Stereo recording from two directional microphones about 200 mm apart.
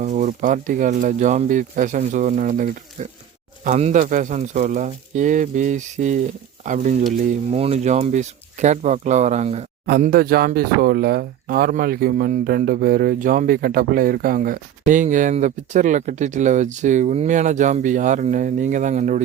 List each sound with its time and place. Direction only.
0.0 s speech: 40° right (ahead or behind)
9.8 s speech: 50° right (ahead or behind)